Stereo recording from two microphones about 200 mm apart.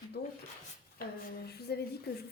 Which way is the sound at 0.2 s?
55° left (ahead or behind).